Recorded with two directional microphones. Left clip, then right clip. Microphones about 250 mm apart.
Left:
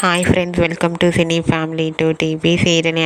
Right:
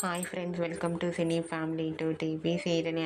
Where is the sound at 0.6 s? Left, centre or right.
Left.